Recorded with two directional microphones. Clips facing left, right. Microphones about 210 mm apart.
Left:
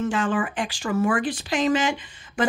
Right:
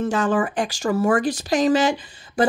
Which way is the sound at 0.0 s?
40° right (ahead or behind).